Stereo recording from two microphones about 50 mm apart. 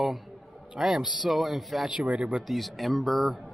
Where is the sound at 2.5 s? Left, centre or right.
Centre.